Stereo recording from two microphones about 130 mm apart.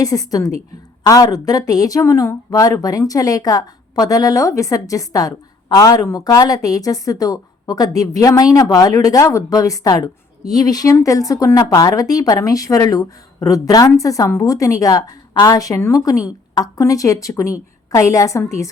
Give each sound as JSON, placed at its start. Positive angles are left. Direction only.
{"t": 0.0, "sound": "a woman's voice", "side_deg": 30}